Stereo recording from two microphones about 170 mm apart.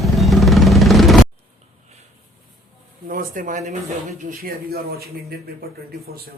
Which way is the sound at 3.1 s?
55° right (ahead or behind).